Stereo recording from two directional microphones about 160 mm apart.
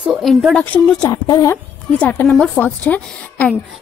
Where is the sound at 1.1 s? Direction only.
25° left (ahead or behind).